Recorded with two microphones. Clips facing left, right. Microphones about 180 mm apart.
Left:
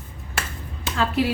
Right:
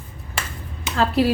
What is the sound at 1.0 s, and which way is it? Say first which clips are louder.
Speech: right 4 dB; 35° right (ahead or behind).